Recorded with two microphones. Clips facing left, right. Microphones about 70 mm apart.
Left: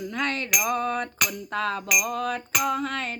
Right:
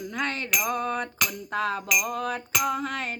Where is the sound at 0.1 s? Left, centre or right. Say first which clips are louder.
Left 1 dB; right.